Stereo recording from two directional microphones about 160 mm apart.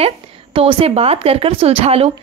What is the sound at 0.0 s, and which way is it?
A woman's voice, 35° right (ahead or behind).